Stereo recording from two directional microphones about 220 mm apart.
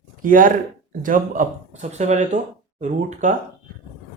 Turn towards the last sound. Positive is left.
turn(degrees=-35)  # may be behind; listen again after turning